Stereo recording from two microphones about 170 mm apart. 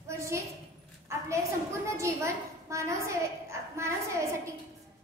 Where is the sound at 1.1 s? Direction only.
15° right (ahead or behind).